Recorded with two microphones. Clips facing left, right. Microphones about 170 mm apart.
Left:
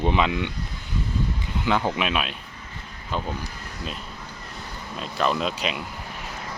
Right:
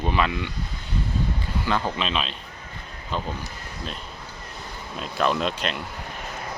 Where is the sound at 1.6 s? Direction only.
15° left (ahead or behind).